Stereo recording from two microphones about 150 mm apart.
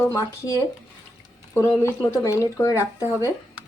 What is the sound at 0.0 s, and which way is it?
Speech, 20° left (ahead or behind).